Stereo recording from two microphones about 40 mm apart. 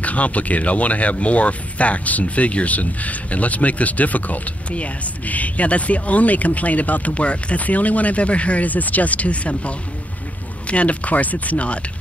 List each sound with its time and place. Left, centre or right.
0.0 s speech: left